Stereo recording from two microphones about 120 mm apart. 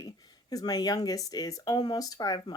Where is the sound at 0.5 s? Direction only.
35° left (ahead or behind).